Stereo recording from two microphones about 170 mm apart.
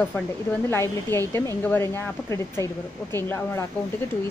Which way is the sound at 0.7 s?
15° left (ahead or behind).